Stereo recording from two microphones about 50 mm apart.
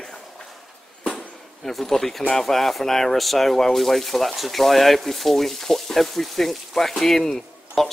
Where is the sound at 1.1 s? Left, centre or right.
Centre.